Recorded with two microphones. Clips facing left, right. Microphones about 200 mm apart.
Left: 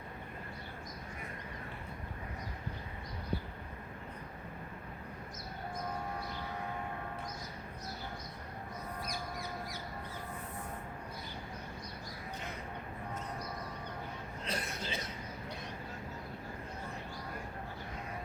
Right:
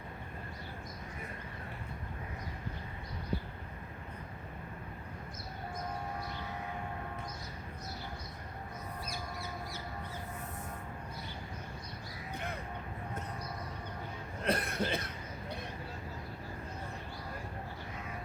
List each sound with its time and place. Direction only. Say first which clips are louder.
14.4 s cough: right 8 dB; 60° right (ahead or behind)